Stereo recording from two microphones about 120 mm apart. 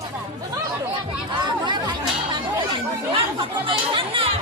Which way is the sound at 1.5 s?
40° right (ahead or behind).